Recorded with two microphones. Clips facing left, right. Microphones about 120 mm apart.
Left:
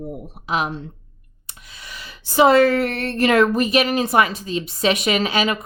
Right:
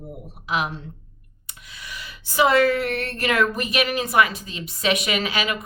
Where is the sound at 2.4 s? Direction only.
30° left (ahead or behind).